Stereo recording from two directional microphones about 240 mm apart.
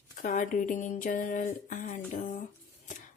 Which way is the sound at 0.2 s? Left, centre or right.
Left.